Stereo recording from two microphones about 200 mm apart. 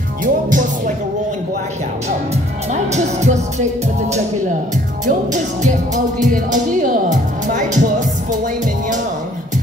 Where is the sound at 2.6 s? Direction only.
35° right (ahead or behind).